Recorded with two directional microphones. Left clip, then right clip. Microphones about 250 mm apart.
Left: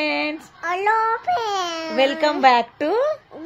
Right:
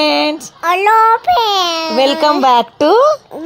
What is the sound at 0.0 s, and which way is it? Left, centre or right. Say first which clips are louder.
Child singing: right 10 dB; right.